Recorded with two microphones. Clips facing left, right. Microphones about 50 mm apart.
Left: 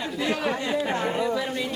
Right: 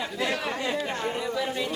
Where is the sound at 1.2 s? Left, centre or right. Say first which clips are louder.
Left 3 dB; centre.